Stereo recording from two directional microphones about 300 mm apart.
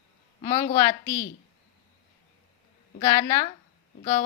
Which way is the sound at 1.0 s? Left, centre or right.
Centre.